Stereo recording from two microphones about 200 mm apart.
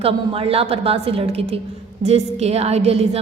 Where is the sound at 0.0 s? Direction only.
30° right (ahead or behind).